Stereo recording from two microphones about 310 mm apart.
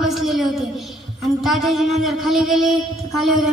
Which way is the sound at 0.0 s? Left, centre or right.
Centre.